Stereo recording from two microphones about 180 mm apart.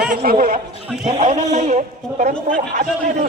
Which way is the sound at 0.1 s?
50° right (ahead or behind).